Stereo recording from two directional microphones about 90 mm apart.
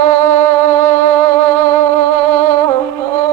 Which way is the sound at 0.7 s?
35° left (ahead or behind).